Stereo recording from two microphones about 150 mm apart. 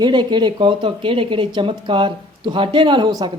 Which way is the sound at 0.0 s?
30° right (ahead or behind).